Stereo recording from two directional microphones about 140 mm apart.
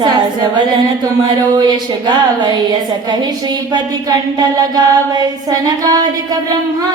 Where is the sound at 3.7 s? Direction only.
30° right (ahead or behind).